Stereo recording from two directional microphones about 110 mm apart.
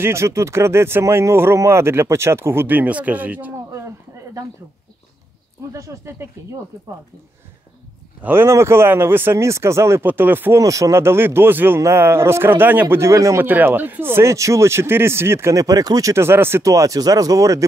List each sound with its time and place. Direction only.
0.0 s speech: 25° right (ahead or behind)
5.7 s speech: 30° right (ahead or behind)
8.2 s speech: 20° right (ahead or behind)
10.6 s speech: 30° right (ahead or behind)